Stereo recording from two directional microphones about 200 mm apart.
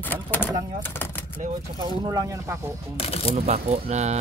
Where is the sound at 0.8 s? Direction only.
10° left (ahead or behind).